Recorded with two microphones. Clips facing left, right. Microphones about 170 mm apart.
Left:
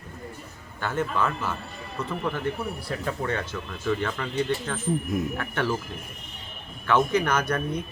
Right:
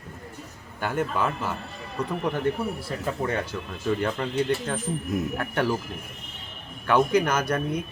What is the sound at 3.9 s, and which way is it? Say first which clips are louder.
Speech: right 2 dB; 30° right (ahead or behind).